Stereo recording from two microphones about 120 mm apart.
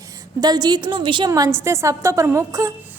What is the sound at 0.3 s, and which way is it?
Speech, 35° right (ahead or behind).